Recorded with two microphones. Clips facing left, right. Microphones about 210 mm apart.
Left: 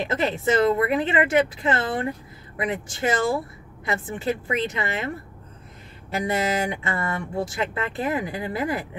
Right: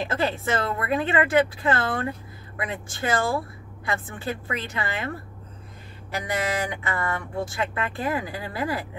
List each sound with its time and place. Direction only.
0.0 s speech: 20° left (ahead or behind)
6.1 s speech: 25° left (ahead or behind)